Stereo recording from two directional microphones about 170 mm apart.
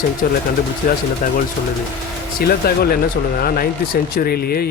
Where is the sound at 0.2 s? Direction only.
55° left (ahead or behind).